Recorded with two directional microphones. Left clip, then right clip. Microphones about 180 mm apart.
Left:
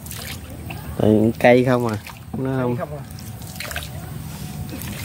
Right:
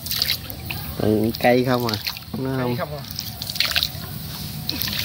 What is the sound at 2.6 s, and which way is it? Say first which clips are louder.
Speech: even; centre (ahead or behind).